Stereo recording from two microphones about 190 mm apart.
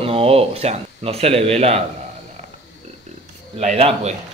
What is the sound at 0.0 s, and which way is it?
Speech, 30° right (ahead or behind).